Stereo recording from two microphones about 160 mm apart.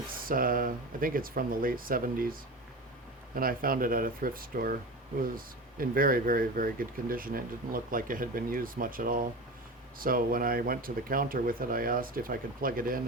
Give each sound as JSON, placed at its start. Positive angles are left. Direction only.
{"t": 0.2, "sound": "speech", "side_deg": -60}
{"t": 3.3, "sound": "speech", "side_deg": -65}